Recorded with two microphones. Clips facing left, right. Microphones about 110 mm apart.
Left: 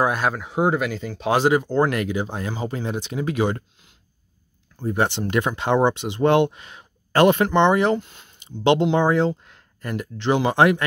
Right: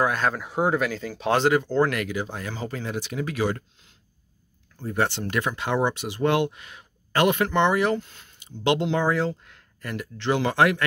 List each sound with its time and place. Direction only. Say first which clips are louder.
0.0 s a sound: left 2 dB; 15° left (ahead or behind)
0.3 s speech: left 2 dB; centre (ahead or behind)
1.4 s speech: left 2 dB; 15° left (ahead or behind)
4.7 s speech: left 3 dB; 15° left (ahead or behind)